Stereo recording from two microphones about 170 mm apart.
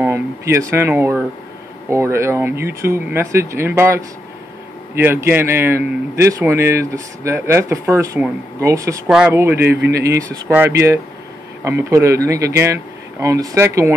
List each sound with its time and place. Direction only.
0.0 s a man's voice: 15° right (ahead or behind)